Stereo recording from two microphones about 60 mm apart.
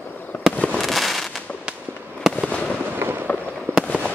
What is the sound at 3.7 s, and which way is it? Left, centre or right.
Fireworks, right.